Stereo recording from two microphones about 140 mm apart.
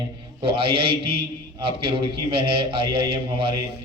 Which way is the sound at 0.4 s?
40° right (ahead or behind).